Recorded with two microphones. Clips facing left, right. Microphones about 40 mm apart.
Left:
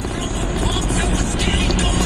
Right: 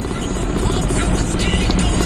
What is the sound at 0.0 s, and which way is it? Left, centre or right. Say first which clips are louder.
Vehicle: right 1 dB; left.